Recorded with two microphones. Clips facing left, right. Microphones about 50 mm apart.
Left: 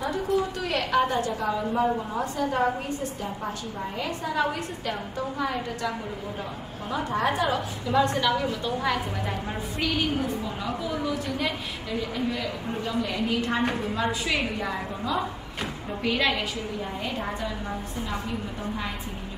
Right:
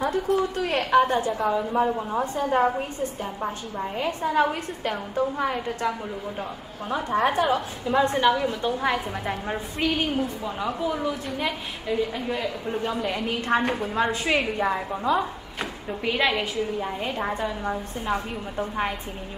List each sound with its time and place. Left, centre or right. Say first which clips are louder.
0.0 s a woman's voice: right 2 dB; right
1.1 s a woman's voice: right 3 dB; right
2.3 s a woman's voice: right 3 dB; right
18.0 s a woman's voice: right 6 dB; right